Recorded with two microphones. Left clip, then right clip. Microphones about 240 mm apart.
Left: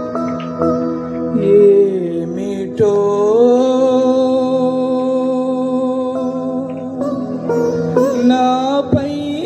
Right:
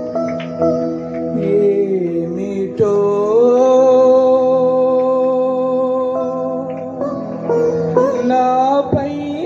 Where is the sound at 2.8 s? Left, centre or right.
Left.